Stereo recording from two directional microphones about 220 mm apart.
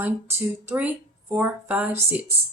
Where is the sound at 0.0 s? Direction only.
10° right (ahead or behind).